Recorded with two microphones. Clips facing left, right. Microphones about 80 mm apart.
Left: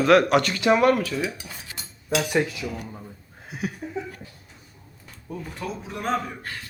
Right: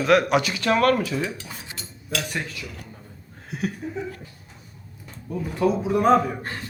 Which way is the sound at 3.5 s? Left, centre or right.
Centre.